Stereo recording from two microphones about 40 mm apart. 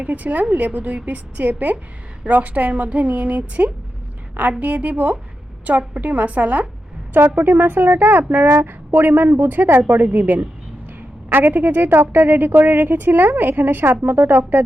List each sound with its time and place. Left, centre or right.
0.0 s a woman's voice: right
7.1 s a woman's voice: right
9.9 s a woman's voice: right
11.3 s a woman's voice: right